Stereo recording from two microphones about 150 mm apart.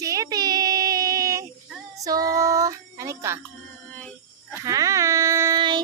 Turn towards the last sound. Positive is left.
turn(degrees=-20)  # may be behind; listen again after turning